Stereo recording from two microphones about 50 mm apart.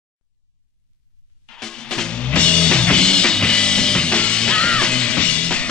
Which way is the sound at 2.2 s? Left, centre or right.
Left.